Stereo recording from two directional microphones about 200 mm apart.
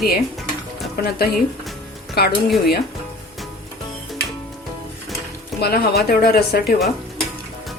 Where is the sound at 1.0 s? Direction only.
50° left (ahead or behind).